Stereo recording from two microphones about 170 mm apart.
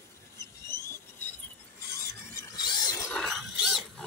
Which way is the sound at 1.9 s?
15° left (ahead or behind).